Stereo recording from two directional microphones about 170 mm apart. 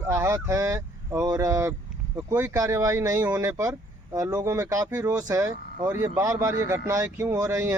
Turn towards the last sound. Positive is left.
turn(degrees=-15)  # may be behind; listen again after turning